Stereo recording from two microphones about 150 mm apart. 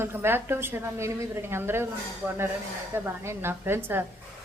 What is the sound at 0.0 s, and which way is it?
A woman's voice, 15° right (ahead or behind).